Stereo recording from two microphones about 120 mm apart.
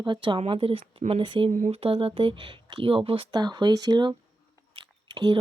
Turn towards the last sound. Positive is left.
turn(degrees=-35)  # may be behind; listen again after turning